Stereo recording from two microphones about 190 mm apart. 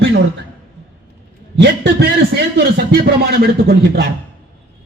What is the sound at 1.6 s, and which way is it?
A man's voice, 60° right (ahead or behind).